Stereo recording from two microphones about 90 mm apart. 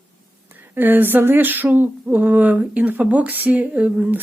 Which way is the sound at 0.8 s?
20° right (ahead or behind).